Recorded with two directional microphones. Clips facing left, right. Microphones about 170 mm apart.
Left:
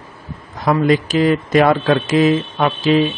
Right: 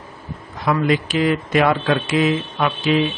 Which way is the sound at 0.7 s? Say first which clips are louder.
Left 4 dB; 40° left (ahead or behind).